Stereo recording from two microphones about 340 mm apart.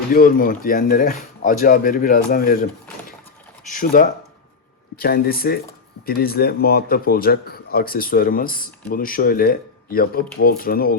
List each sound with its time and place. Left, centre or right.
0.1 s a man's voice: left
3.7 s a man's voice: left